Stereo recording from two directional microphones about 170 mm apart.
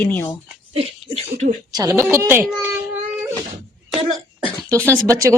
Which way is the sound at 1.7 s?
20° right (ahead or behind).